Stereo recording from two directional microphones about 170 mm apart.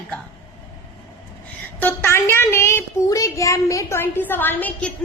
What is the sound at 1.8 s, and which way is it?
Speech, 15° left (ahead or behind).